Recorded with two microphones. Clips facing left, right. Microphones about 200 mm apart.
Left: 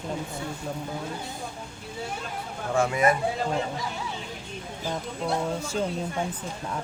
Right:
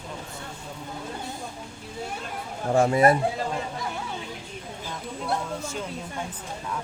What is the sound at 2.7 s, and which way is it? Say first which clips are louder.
Speech: right 4 dB; 35° right (ahead or behind).